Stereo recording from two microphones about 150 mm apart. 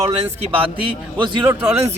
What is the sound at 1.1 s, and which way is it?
Speech, 30° right (ahead or behind).